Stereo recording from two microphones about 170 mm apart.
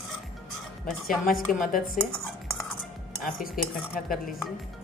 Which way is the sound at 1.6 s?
55° left (ahead or behind).